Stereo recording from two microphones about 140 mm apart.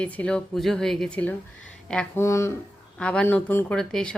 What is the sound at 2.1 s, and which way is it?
Speech, 20° left (ahead or behind).